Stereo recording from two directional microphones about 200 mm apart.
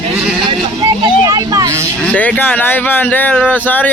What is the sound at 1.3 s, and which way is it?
Vehicle, 15° right (ahead or behind).